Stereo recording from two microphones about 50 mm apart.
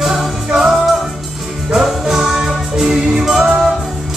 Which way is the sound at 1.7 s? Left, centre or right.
Centre.